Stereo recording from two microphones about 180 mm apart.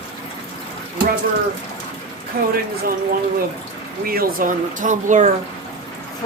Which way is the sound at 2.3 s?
55° right (ahead or behind).